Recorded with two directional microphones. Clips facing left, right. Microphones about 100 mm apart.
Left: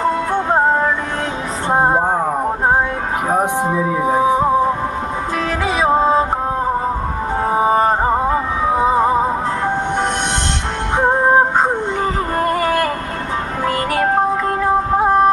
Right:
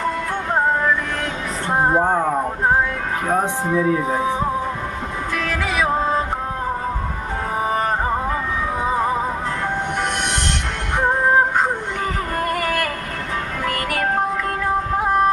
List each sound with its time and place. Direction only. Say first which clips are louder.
0.0 s music: left 6 dB; 30° left (ahead or behind)
3.2 s music: left 3 dB; 20° left (ahead or behind)
5.5 s music: left 5 dB; 30° left (ahead or behind)
7.5 s music: left 6 dB; 30° left (ahead or behind)
10.9 s music: left 4 dB; 30° left (ahead or behind)
12.4 s a sound: left 5 dB; 30° left (ahead or behind)
13.7 s music: left 5 dB; 25° left (ahead or behind)